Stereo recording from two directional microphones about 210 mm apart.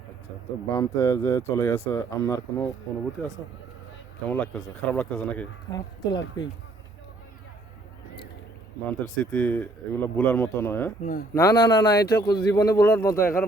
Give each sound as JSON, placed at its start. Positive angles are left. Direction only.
{"t": 0.7, "sound": "speech", "side_deg": 15}
{"t": 4.3, "sound": "speech", "side_deg": 5}
{"t": 5.7, "sound": "speech", "side_deg": 20}
{"t": 8.9, "sound": "speech", "side_deg": 5}
{"t": 11.0, "sound": "speech", "side_deg": 40}
{"t": 11.3, "sound": "speech", "side_deg": 20}